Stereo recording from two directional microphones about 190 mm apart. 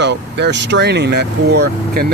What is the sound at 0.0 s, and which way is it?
Speech, 65° right (ahead or behind).